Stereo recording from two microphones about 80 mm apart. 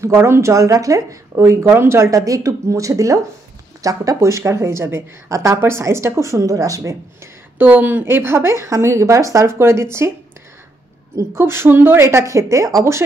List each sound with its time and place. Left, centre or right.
0.0 s speech: right
7.5 s speech: right
11.1 s speech: right